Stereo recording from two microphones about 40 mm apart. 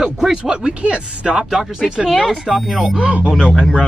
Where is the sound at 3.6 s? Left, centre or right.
Left.